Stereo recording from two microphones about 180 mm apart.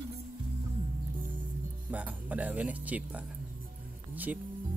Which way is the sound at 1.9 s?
10° right (ahead or behind).